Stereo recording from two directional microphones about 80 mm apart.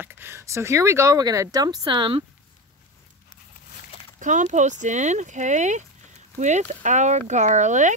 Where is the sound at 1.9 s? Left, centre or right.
Right.